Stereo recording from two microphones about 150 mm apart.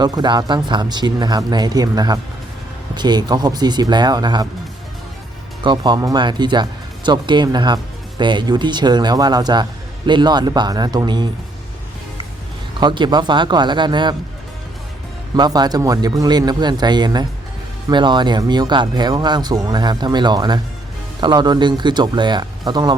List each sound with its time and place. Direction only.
0.0 s speech: 30° right (ahead or behind)
5.6 s speech: 30° right (ahead or behind)
12.8 s speech: 30° right (ahead or behind)
15.4 s speech: 25° right (ahead or behind)